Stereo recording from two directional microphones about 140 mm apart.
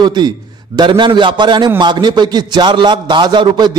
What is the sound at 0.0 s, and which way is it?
A man's voice, 30° right (ahead or behind).